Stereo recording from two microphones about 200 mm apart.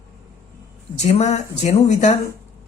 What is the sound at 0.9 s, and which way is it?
Speech, 35° left (ahead or behind).